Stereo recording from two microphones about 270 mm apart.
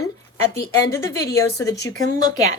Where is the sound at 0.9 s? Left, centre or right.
Centre.